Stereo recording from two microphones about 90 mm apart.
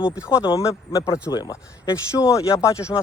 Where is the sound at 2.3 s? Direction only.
35° left (ahead or behind).